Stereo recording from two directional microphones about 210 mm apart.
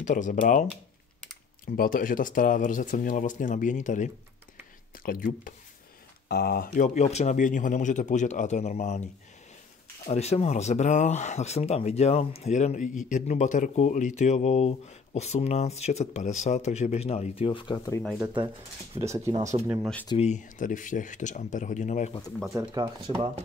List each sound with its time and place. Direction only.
0.0 s speech: 35° left (ahead or behind)
1.8 s speech: 40° left (ahead or behind); by 18.0 s 20° left (ahead or behind)
18.0 s speech: 5° right (ahead or behind)
20.1 s speech: 30° left (ahead or behind)
22.5 s speech: 15° right (ahead or behind)